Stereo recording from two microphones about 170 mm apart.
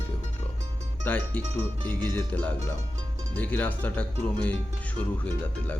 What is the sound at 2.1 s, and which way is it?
Speech, 10° left (ahead or behind).